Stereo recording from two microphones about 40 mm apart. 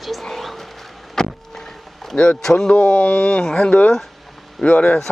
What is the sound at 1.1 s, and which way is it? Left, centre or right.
Vehicle, centre.